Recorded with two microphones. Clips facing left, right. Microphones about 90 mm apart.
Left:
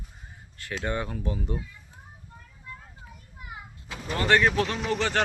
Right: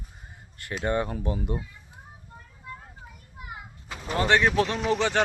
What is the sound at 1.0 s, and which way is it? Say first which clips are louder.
Speech: right 2 dB; 40° right (ahead or behind).